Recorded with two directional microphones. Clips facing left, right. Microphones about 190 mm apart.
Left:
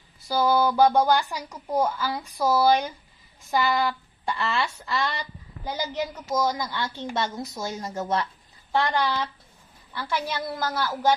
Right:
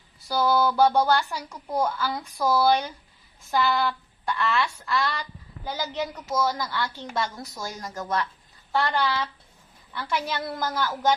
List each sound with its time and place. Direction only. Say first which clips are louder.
0.3 s speech: left 1 dB; 10° left (ahead or behind)
4.3 s a woman's voice: right 1 dB; 25° left (ahead or behind)
8.7 s speech: left 1 dB; 15° left (ahead or behind)
10.4 s speech: even; 5° left (ahead or behind)